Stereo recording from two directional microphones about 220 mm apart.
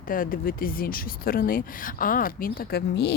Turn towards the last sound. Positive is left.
turn(degrees=45)  # may be behind; listen again after turning